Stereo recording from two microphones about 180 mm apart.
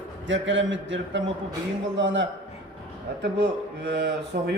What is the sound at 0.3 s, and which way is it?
A man's voice, 90° right.